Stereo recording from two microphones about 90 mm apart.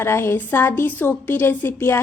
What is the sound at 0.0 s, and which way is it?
Speech, 25° left (ahead or behind).